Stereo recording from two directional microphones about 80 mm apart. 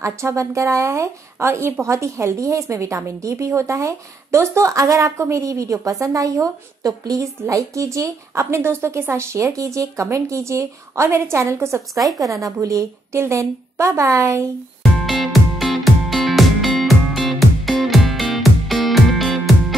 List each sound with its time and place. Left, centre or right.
0.0 s speech: right
14.8 s music: centre